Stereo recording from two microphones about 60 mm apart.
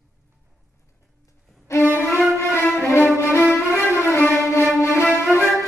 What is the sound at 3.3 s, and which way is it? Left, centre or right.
Music, left.